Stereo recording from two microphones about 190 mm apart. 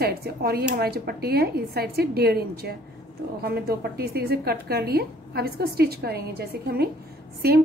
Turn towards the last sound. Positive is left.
turn(degrees=-55)  # may be behind; listen again after turning